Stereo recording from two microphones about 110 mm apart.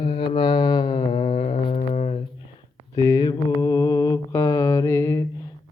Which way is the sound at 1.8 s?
70° left (ahead or behind).